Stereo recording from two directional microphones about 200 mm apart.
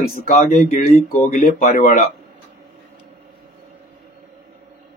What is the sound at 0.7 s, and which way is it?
A man's voice, 45° left (ahead or behind).